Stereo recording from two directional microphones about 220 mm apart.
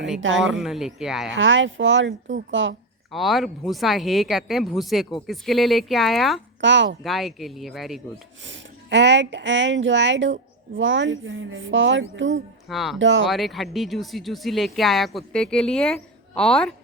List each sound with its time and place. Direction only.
0.2 s speech: 60° right (ahead or behind)
0.4 s speech: centre (ahead or behind)
1.4 s speech: 60° right (ahead or behind)
3.1 s speech: centre (ahead or behind)
6.6 s speech: 55° right (ahead or behind)
7.0 s speech: centre (ahead or behind)
8.4 s speech: 55° right (ahead or behind)
12.6 s speech: centre (ahead or behind)
13.0 s speech: 60° right (ahead or behind)
13.2 s speech: centre (ahead or behind)